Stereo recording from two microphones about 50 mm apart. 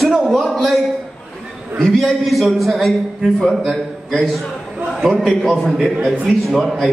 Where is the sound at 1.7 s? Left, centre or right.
Centre.